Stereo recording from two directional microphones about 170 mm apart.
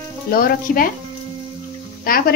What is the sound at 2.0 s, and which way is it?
Speech, 60° left (ahead or behind).